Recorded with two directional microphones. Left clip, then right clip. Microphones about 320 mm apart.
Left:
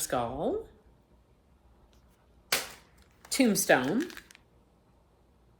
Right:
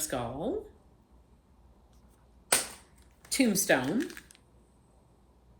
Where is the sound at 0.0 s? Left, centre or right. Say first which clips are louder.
Left 3 dB; centre.